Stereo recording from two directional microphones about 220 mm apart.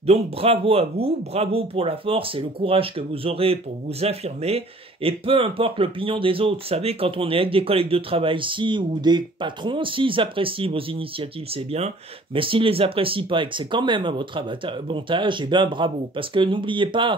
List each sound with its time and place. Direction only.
0.0 s speech: 25° right (ahead or behind)